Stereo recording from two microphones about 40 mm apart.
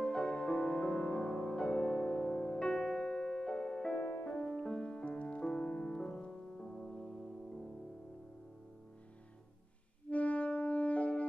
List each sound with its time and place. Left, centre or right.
0.0 s music: left
10.0 s music: left